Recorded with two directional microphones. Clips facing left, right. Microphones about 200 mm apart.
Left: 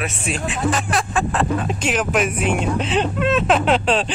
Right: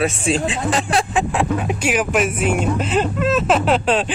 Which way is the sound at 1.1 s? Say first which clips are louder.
Right 1 dB; 15° right (ahead or behind).